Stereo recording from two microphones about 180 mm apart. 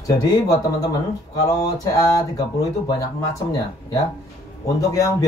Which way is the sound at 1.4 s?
20° left (ahead or behind).